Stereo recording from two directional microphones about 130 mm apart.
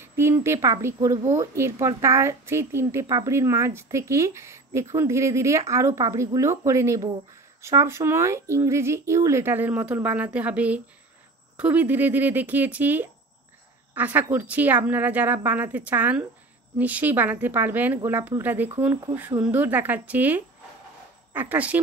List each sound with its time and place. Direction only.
0.0 s a woman's voice: 20° right (ahead or behind)